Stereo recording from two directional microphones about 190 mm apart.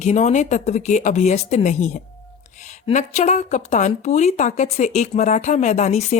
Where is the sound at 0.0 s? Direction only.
40° left (ahead or behind).